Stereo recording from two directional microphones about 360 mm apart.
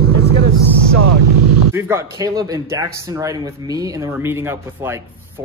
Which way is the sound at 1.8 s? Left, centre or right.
Centre.